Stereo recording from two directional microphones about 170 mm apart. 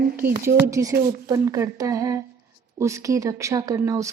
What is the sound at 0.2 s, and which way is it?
Speech, 15° right (ahead or behind).